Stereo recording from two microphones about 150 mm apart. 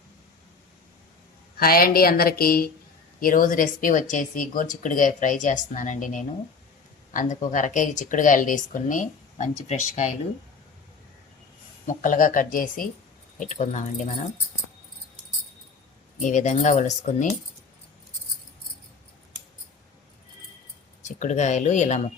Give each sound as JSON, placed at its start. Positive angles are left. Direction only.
{"t": 1.5, "sound": "a woman's voice", "side_deg": 80}
{"t": 3.2, "sound": "speech", "side_deg": 65}
{"t": 11.9, "sound": "speech", "side_deg": 65}
{"t": 13.4, "sound": "speech", "side_deg": 55}
{"t": 16.1, "sound": "speech", "side_deg": 55}
{"t": 21.0, "sound": "speech", "side_deg": 55}